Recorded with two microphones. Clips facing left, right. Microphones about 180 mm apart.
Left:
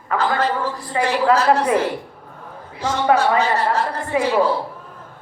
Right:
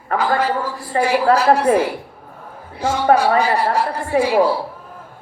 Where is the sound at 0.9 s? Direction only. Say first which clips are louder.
Right 2 dB; 45° right (ahead or behind).